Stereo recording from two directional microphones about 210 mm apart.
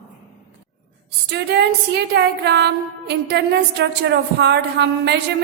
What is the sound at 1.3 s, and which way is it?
A woman's voice, 55° right (ahead or behind).